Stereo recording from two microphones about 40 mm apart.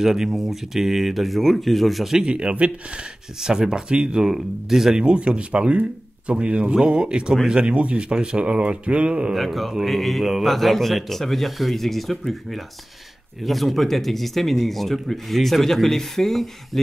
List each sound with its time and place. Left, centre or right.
0.0 s speech: centre
2.1 s speech: right
3.3 s speech: centre
4.3 s speech: centre
4.9 s speech: right
9.3 s speech: centre